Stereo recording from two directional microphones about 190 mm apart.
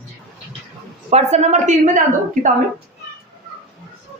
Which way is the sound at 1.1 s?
35° right (ahead or behind).